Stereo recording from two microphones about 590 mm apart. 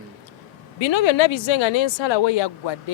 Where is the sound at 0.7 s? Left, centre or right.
Left.